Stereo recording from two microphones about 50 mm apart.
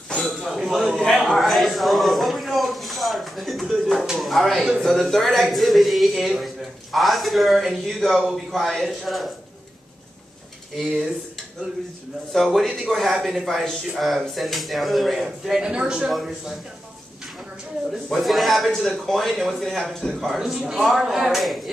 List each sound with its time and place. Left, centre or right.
0.2 s a sound: centre
4.2 s speech: centre
10.8 s speech: centre
12.5 s speech: centre
15.7 s speech: centre
16.1 s speech: centre
18.1 s a man's voice: centre
20.3 s speech: centre